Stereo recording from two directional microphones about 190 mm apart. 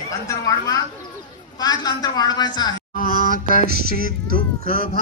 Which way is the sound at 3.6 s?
55° right (ahead or behind).